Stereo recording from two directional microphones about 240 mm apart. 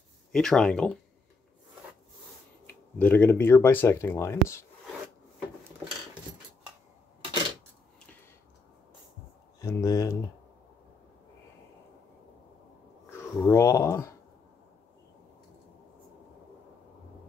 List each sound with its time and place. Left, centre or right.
0.3 s speech: centre
2.6 s speech: centre
9.6 s speech: centre
13.4 s speech: centre